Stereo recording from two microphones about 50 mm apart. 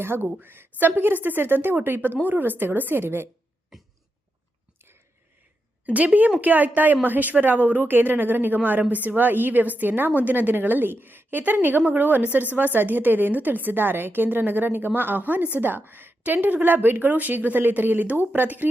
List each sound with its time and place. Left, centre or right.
0.0 s a woman's voice: right
5.8 s speech: right